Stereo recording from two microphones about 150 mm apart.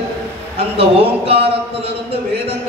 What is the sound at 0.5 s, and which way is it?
Speech, 40° right (ahead or behind).